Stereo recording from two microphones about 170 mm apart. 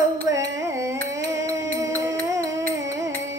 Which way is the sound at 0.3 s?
20° right (ahead or behind).